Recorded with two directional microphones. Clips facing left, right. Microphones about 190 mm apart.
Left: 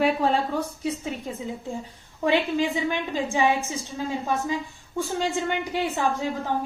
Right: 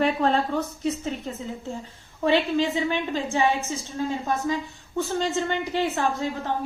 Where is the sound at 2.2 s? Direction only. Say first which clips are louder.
Right 1 dB; 10° left (ahead or behind).